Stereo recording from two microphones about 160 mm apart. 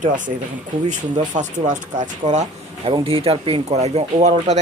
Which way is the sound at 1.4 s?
50° right (ahead or behind).